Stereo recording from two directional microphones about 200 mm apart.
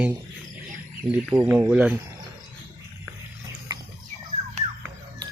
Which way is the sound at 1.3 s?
15° right (ahead or behind).